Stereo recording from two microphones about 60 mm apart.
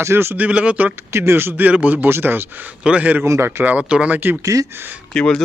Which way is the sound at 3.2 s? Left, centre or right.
Right.